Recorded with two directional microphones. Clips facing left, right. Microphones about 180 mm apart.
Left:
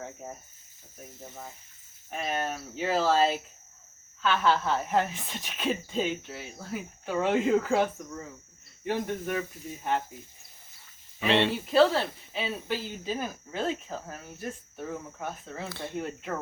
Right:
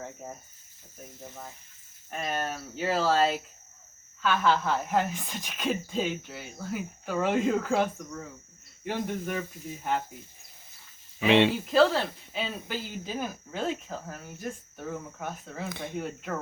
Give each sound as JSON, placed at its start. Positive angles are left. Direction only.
{"t": 0.0, "sound": "cricket", "side_deg": 0}
{"t": 1.2, "sound": "speech", "side_deg": 5}
{"t": 11.2, "sound": "speech", "side_deg": -15}
{"t": 11.6, "sound": "speech", "side_deg": 0}
{"t": 15.7, "sound": "speech", "side_deg": -15}
{"t": 16.0, "sound": "speech", "side_deg": 0}